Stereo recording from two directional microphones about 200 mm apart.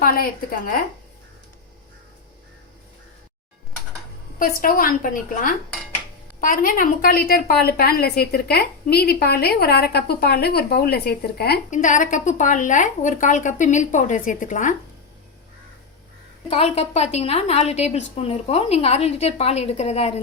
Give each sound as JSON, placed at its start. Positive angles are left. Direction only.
{"t": 0.0, "sound": "a woman's voice", "side_deg": 45}
{"t": 4.4, "sound": "a woman's voice", "side_deg": 45}
{"t": 11.7, "sound": "a woman's voice", "side_deg": 40}
{"t": 16.5, "sound": "a woman's voice", "side_deg": 30}